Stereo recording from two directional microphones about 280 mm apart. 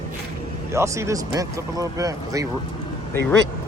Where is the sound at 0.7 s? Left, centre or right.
Centre.